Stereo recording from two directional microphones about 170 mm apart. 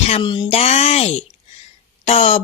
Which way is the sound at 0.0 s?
40° left (ahead or behind).